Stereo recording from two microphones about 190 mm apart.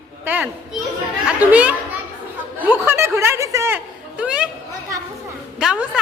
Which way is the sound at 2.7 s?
10° right (ahead or behind).